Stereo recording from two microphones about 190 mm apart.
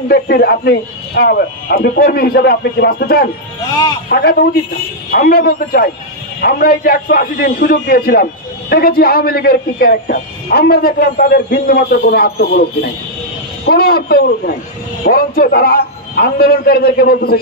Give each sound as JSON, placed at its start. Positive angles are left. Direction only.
{"t": 0.1, "sound": "a man's voice", "side_deg": 55}
{"t": 13.7, "sound": "a man's voice", "side_deg": 55}